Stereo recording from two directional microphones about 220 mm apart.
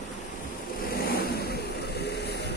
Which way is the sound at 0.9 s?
45° left (ahead or behind).